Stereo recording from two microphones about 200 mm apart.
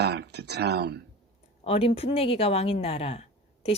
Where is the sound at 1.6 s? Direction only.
30° left (ahead or behind).